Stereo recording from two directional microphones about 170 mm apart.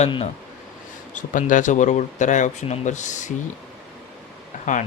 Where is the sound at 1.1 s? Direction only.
50° left (ahead or behind).